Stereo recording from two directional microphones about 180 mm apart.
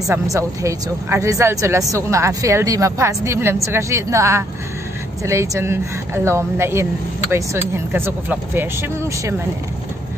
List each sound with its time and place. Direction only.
0.1 s speech: 15° right (ahead or behind)